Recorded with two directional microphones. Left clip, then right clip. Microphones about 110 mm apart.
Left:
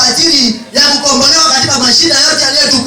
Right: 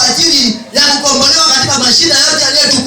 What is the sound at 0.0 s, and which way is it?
Speech, 10° right (ahead or behind).